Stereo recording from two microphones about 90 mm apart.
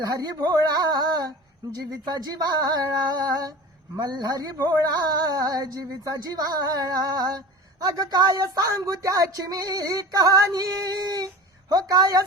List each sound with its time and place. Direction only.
0.0 s speech: 45° right (ahead or behind)